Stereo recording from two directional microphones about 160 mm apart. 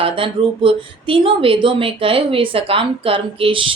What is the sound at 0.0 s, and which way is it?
Speech, 35° right (ahead or behind).